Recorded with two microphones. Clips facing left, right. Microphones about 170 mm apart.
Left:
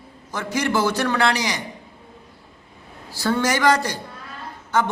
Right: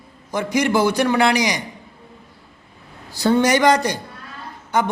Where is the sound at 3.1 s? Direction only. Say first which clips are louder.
Right 5 dB; 20° right (ahead or behind).